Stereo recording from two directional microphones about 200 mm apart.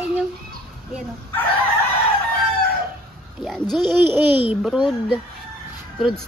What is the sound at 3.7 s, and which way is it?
A woman's voice, centre (ahead or behind).